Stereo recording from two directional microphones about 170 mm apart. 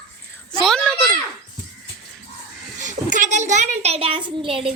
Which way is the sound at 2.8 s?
50° right (ahead or behind).